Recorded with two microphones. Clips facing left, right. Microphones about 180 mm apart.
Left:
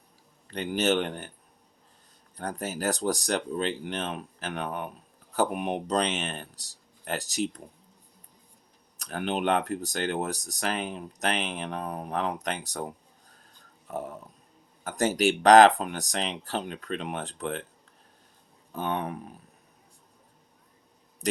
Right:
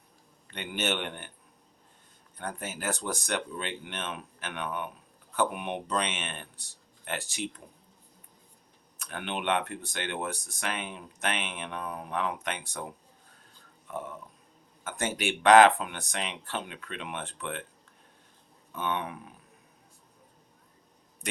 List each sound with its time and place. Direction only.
0.5 s speech: 35° left (ahead or behind)
2.3 s speech: 35° left (ahead or behind)
9.0 s speech: 40° left (ahead or behind)
18.7 s speech: 35° left (ahead or behind)